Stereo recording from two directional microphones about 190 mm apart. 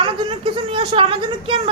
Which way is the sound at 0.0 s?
25° right (ahead or behind).